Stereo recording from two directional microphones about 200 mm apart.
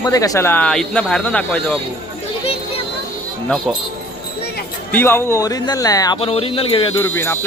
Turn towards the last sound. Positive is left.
turn(degrees=15)  # may be behind; listen again after turning